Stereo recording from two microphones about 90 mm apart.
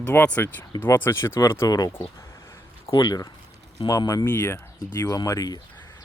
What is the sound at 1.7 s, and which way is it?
Speech, 45° left (ahead or behind).